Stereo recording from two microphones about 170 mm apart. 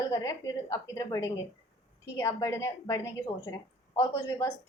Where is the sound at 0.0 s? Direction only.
20° left (ahead or behind).